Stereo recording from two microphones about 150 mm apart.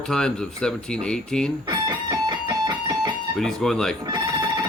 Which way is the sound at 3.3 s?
5° left (ahead or behind).